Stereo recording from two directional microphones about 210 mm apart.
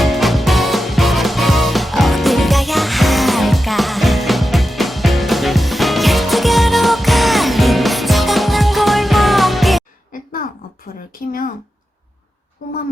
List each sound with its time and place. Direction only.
0.0 s music: centre (ahead or behind)